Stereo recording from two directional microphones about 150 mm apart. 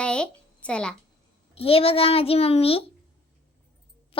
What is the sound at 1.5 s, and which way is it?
A child's voice, 40° left (ahead or behind).